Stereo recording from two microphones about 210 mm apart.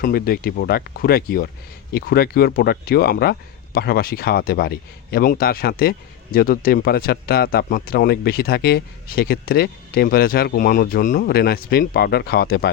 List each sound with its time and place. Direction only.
0.0 s speech: 45° left (ahead or behind)